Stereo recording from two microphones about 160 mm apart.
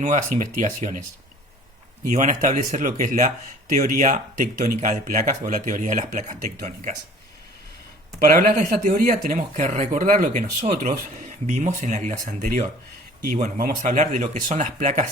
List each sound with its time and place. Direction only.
0.0 s speech: 45° right (ahead or behind)
2.1 s speech: 50° right (ahead or behind)
8.2 s speech: 55° right (ahead or behind)